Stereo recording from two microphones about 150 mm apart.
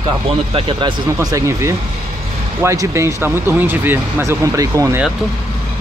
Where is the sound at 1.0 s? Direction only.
20° right (ahead or behind).